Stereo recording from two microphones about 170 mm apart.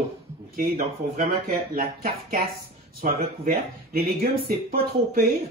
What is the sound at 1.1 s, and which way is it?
Speech, 60° right (ahead or behind).